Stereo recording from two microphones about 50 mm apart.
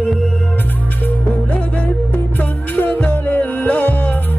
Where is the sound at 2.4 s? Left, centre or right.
Left.